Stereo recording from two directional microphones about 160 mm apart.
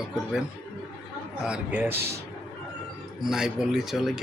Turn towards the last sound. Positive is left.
turn(degrees=0)  # may be behind; listen again after turning